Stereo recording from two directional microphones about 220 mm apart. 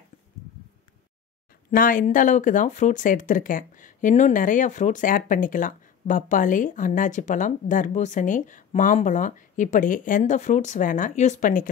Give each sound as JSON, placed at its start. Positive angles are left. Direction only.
{"t": 1.7, "sound": "speech", "side_deg": 40}